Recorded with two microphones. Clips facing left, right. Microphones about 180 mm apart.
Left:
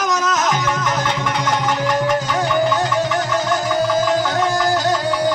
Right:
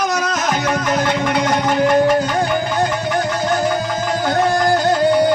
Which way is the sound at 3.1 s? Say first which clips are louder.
Right 1 dB; 50° right (ahead or behind).